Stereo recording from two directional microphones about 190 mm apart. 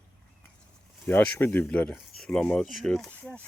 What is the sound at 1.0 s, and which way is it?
Speech, 10° left (ahead or behind).